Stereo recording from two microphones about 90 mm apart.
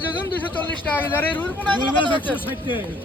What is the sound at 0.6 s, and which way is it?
Speech, 20° left (ahead or behind).